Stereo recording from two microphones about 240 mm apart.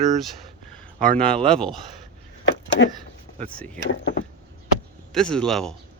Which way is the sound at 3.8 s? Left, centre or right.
Left.